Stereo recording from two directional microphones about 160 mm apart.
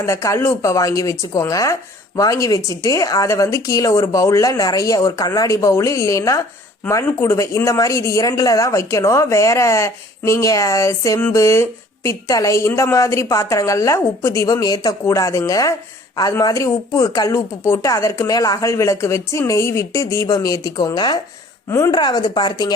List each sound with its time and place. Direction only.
0.0 s a woman's voice: 20° left (ahead or behind)